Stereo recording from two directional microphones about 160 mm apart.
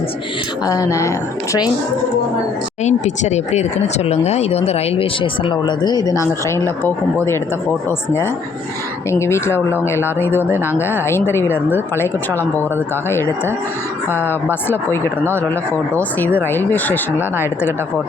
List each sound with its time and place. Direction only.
0.6 s speech: 20° left (ahead or behind)
2.8 s speech: 45° left (ahead or behind); by 17.7 s 15° left (ahead or behind)